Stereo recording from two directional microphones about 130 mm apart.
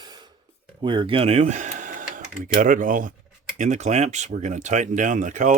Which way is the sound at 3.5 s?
65° right (ahead or behind).